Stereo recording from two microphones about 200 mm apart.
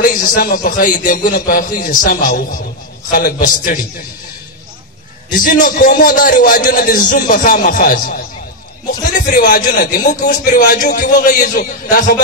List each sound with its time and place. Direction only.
0.0 s a man's voice: 40° left (ahead or behind)
5.3 s a man's voice: 40° left (ahead or behind)
9.2 s a man's voice: 45° left (ahead or behind)